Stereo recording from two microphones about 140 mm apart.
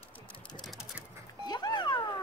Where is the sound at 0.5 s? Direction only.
Centre (ahead or behind).